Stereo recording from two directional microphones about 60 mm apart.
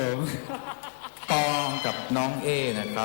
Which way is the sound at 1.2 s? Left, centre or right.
Right.